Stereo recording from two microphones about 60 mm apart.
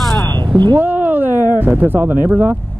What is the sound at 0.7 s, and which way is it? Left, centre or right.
Speech, right.